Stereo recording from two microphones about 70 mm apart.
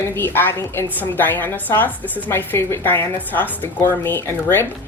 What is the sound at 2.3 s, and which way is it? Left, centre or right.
Speech, left.